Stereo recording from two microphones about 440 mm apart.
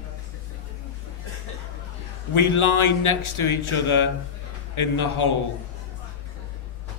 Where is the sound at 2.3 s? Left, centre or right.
Left.